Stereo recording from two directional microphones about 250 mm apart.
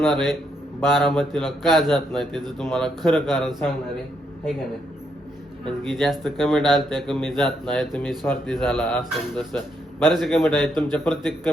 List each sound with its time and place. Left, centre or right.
0.0 s speech: centre
5.6 s speech: centre